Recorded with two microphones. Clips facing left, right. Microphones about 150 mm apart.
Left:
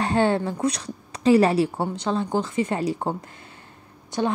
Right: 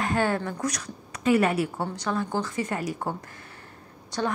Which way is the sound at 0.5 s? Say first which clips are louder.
Left 5 dB; 25° left (ahead or behind).